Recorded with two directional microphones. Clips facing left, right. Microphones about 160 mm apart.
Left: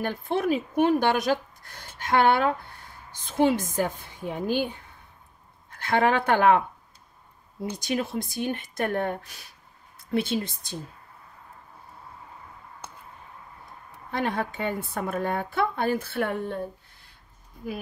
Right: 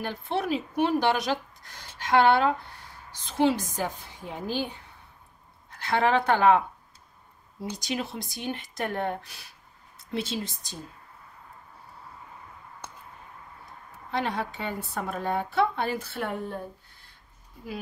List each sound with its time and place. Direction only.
0.0 s a woman's voice: 50° left (ahead or behind)
5.7 s speech: 50° left (ahead or behind)
7.6 s a woman's voice: 55° left (ahead or behind)
14.1 s a woman's voice: 50° left (ahead or behind)